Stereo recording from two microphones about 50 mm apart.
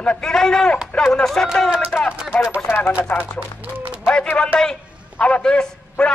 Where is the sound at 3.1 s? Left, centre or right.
Left.